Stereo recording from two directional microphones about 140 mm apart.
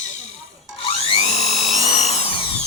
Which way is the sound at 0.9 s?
40° left (ahead or behind).